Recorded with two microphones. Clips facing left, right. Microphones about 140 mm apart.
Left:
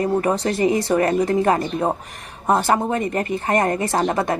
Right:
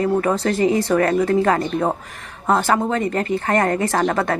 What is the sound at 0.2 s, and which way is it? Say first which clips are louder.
Speech: right 1 dB; 15° left (ahead or behind).